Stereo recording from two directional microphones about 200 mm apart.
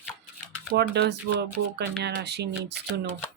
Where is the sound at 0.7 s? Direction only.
55° right (ahead or behind).